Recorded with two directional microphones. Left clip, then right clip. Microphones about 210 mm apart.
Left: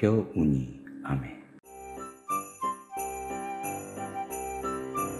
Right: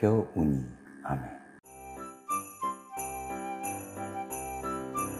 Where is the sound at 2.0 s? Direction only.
Centre (ahead or behind).